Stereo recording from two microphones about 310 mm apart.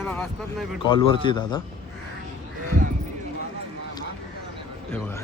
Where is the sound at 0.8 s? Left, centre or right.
Centre.